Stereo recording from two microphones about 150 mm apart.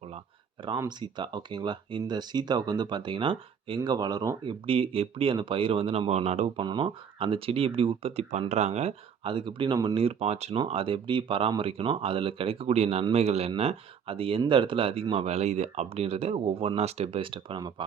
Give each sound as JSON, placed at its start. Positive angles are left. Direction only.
{"t": 0.9, "sound": "speech", "side_deg": -30}
{"t": 4.6, "sound": "speech", "side_deg": -40}
{"t": 6.6, "sound": "speech", "side_deg": -30}
{"t": 10.0, "sound": "speech", "side_deg": -40}